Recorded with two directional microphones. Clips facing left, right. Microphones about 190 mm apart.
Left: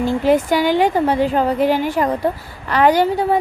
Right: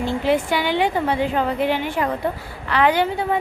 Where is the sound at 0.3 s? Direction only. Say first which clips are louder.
Left 5 dB; 40° left (ahead or behind).